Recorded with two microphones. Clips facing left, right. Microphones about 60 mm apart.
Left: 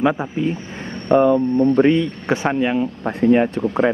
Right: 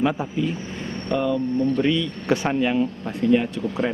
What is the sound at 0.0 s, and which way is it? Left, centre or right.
Speech, left.